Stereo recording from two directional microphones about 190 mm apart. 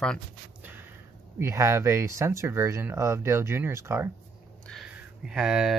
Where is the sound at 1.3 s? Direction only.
15° right (ahead or behind).